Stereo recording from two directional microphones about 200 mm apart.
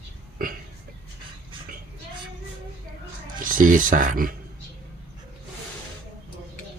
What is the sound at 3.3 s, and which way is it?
Speech, 40° right (ahead or behind).